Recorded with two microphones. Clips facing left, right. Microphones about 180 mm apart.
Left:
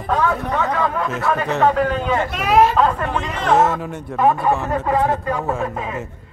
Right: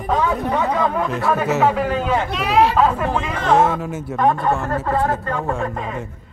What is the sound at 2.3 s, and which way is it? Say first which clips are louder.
Speech: left 2 dB; 50° left (ahead or behind).